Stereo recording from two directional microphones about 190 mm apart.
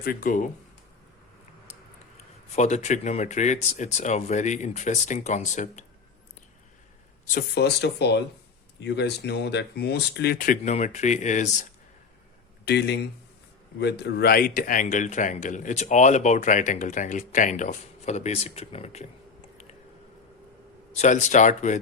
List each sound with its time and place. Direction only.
0.0 s speech: 50° left (ahead or behind)
2.6 s speech: 40° left (ahead or behind)
7.3 s speech: 55° left (ahead or behind)
12.6 s speech: 60° left (ahead or behind); by 19.0 s 35° left (ahead or behind)
20.9 s speech: 35° left (ahead or behind)